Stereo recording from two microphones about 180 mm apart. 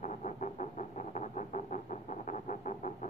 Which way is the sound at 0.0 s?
40° left (ahead or behind).